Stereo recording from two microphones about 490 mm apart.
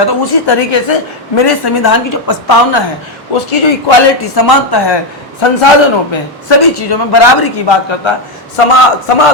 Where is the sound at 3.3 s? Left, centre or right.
Left.